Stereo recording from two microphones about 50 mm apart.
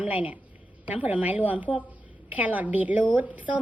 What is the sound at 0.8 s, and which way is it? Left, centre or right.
A woman's voice, right.